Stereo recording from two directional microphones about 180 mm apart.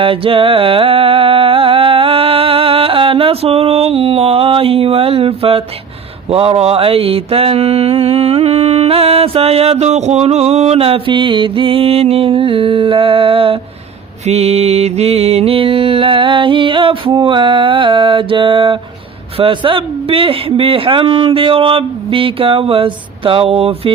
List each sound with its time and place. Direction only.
0.0 s music: 30° right (ahead or behind)
6.3 s mantra: 35° right (ahead or behind)